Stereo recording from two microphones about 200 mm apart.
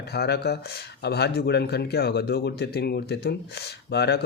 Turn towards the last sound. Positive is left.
turn(degrees=55)  # may be behind; listen again after turning